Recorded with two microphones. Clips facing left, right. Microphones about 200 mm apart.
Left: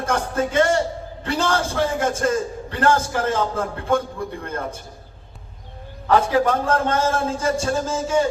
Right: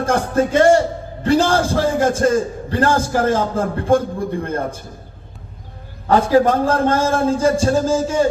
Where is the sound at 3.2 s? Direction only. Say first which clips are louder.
Right 5 dB; 55° right (ahead or behind).